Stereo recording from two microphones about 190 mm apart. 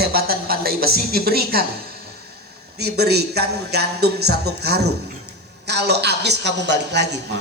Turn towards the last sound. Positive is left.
turn(degrees=-65)  # may be behind; listen again after turning